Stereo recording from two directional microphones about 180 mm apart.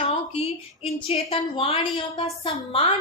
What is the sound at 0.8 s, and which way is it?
A woman's voice, 30° left (ahead or behind).